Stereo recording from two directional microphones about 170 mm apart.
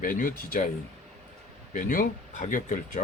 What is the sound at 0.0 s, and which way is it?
Speech, 55° left (ahead or behind).